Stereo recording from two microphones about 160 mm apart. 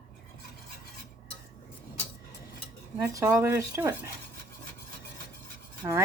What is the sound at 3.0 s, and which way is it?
Speech, 20° right (ahead or behind).